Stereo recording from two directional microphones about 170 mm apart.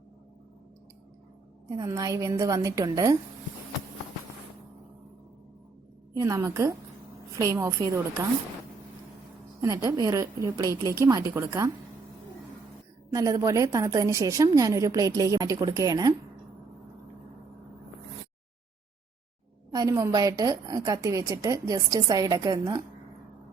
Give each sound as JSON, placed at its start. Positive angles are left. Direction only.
{"t": 1.7, "sound": "a woman's voice", "side_deg": -20}
{"t": 6.1, "sound": "a woman's voice", "side_deg": -15}
{"t": 9.6, "sound": "a woman's voice", "side_deg": -20}
{"t": 13.1, "sound": "a woman's voice", "side_deg": -20}
{"t": 19.7, "sound": "a woman's voice", "side_deg": -20}